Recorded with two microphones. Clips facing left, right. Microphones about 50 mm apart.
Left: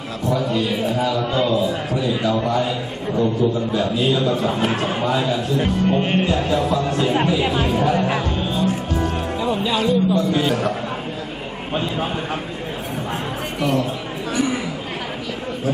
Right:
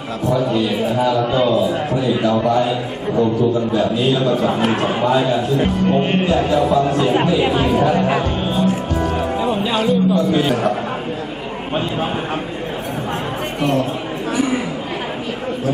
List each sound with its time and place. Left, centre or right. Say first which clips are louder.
0.4 s a man's voice: right 3 dB; centre
3.8 s a man's voice: right 3 dB; centre
8.4 s music: right 3 dB; right
8.6 s music: right 3 dB; centre
9.7 s a man's voice: right 2 dB; centre
14.3 s chatter: right 2 dB; centre